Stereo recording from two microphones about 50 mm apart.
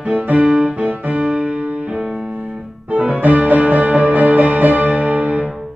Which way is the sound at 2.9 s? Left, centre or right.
Right.